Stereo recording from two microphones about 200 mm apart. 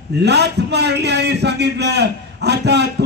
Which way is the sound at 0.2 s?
55° right (ahead or behind).